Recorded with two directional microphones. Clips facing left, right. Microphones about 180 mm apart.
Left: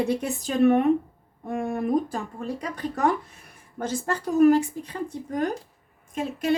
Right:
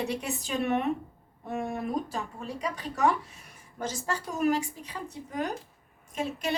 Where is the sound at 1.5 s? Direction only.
50° left (ahead or behind).